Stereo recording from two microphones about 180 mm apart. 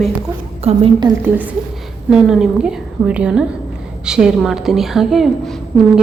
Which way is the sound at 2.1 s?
5° right (ahead or behind).